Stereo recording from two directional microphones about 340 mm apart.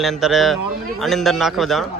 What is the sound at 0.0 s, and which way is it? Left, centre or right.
A man's voice, centre.